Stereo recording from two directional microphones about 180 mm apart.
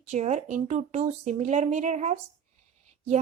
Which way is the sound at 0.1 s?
40° right (ahead or behind).